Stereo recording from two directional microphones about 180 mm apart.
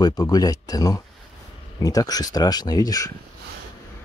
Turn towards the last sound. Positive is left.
turn(degrees=20)  # may be behind; listen again after turning